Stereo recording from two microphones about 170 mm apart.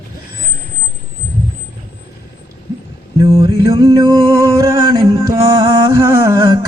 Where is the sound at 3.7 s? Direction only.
20° right (ahead or behind).